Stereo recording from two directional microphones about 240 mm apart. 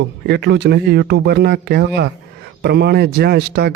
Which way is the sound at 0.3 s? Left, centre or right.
Right.